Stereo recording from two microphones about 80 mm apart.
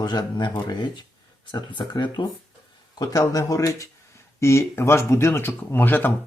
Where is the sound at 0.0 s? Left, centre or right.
Left.